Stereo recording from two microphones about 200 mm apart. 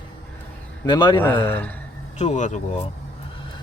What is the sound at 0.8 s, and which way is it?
Speech, 20° left (ahead or behind).